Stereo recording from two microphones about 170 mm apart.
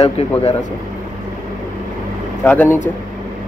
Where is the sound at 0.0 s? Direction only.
35° left (ahead or behind).